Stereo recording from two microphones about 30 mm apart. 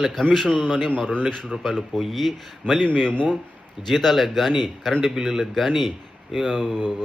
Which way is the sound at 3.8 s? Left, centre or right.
Centre.